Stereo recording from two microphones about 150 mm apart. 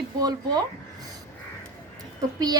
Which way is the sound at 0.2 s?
25° right (ahead or behind).